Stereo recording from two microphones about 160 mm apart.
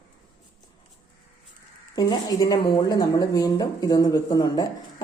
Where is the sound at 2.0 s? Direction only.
25° left (ahead or behind).